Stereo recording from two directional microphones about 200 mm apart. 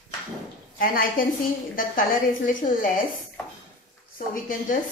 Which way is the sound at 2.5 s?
45° left (ahead or behind).